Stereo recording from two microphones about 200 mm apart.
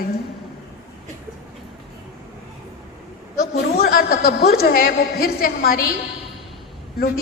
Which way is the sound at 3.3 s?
50° left (ahead or behind).